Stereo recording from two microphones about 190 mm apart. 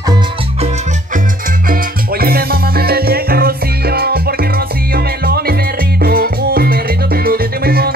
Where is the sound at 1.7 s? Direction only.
50° right (ahead or behind).